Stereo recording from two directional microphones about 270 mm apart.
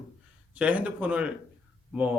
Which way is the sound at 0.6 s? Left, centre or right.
Centre.